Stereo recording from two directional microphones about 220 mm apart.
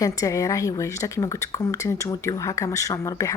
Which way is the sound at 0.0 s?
15° left (ahead or behind).